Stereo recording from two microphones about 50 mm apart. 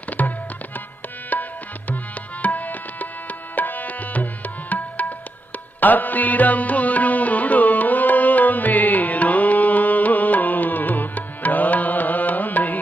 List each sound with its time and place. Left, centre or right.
0.2 s music: left
1.3 s tabla: left
5.8 s music: left